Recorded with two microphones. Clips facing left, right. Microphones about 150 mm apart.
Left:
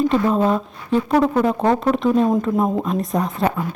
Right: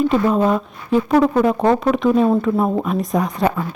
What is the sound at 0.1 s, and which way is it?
Speech, 5° right (ahead or behind).